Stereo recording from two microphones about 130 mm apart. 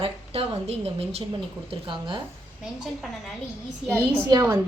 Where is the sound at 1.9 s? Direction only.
40° right (ahead or behind).